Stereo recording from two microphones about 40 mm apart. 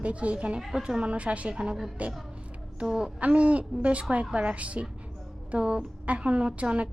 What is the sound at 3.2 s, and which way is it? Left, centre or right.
A woman's voice, right.